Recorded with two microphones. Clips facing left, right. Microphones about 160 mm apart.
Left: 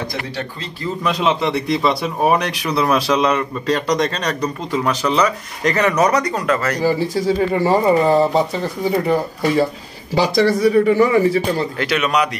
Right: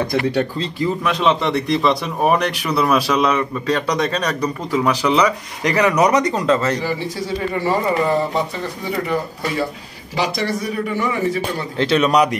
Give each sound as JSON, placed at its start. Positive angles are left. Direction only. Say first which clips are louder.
{"t": 1.0, "sound": "a man's voice", "louder": "left 2 dB", "side_deg": 5}
{"t": 7.6, "sound": "speech", "louder": "left 4 dB", "side_deg": 30}
{"t": 10.1, "sound": "speech", "louder": "left 6 dB", "side_deg": 35}
{"t": 11.8, "sound": "speech", "louder": "right 6 dB", "side_deg": -30}